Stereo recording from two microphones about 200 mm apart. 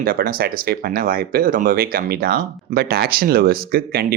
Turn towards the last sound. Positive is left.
turn(degrees=-50)  # may be behind; listen again after turning